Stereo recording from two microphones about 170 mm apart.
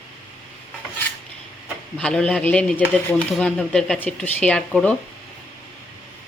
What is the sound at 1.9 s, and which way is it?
Speech, 5° left (ahead or behind).